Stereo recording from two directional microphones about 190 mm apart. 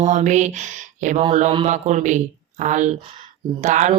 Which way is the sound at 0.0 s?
40° right (ahead or behind).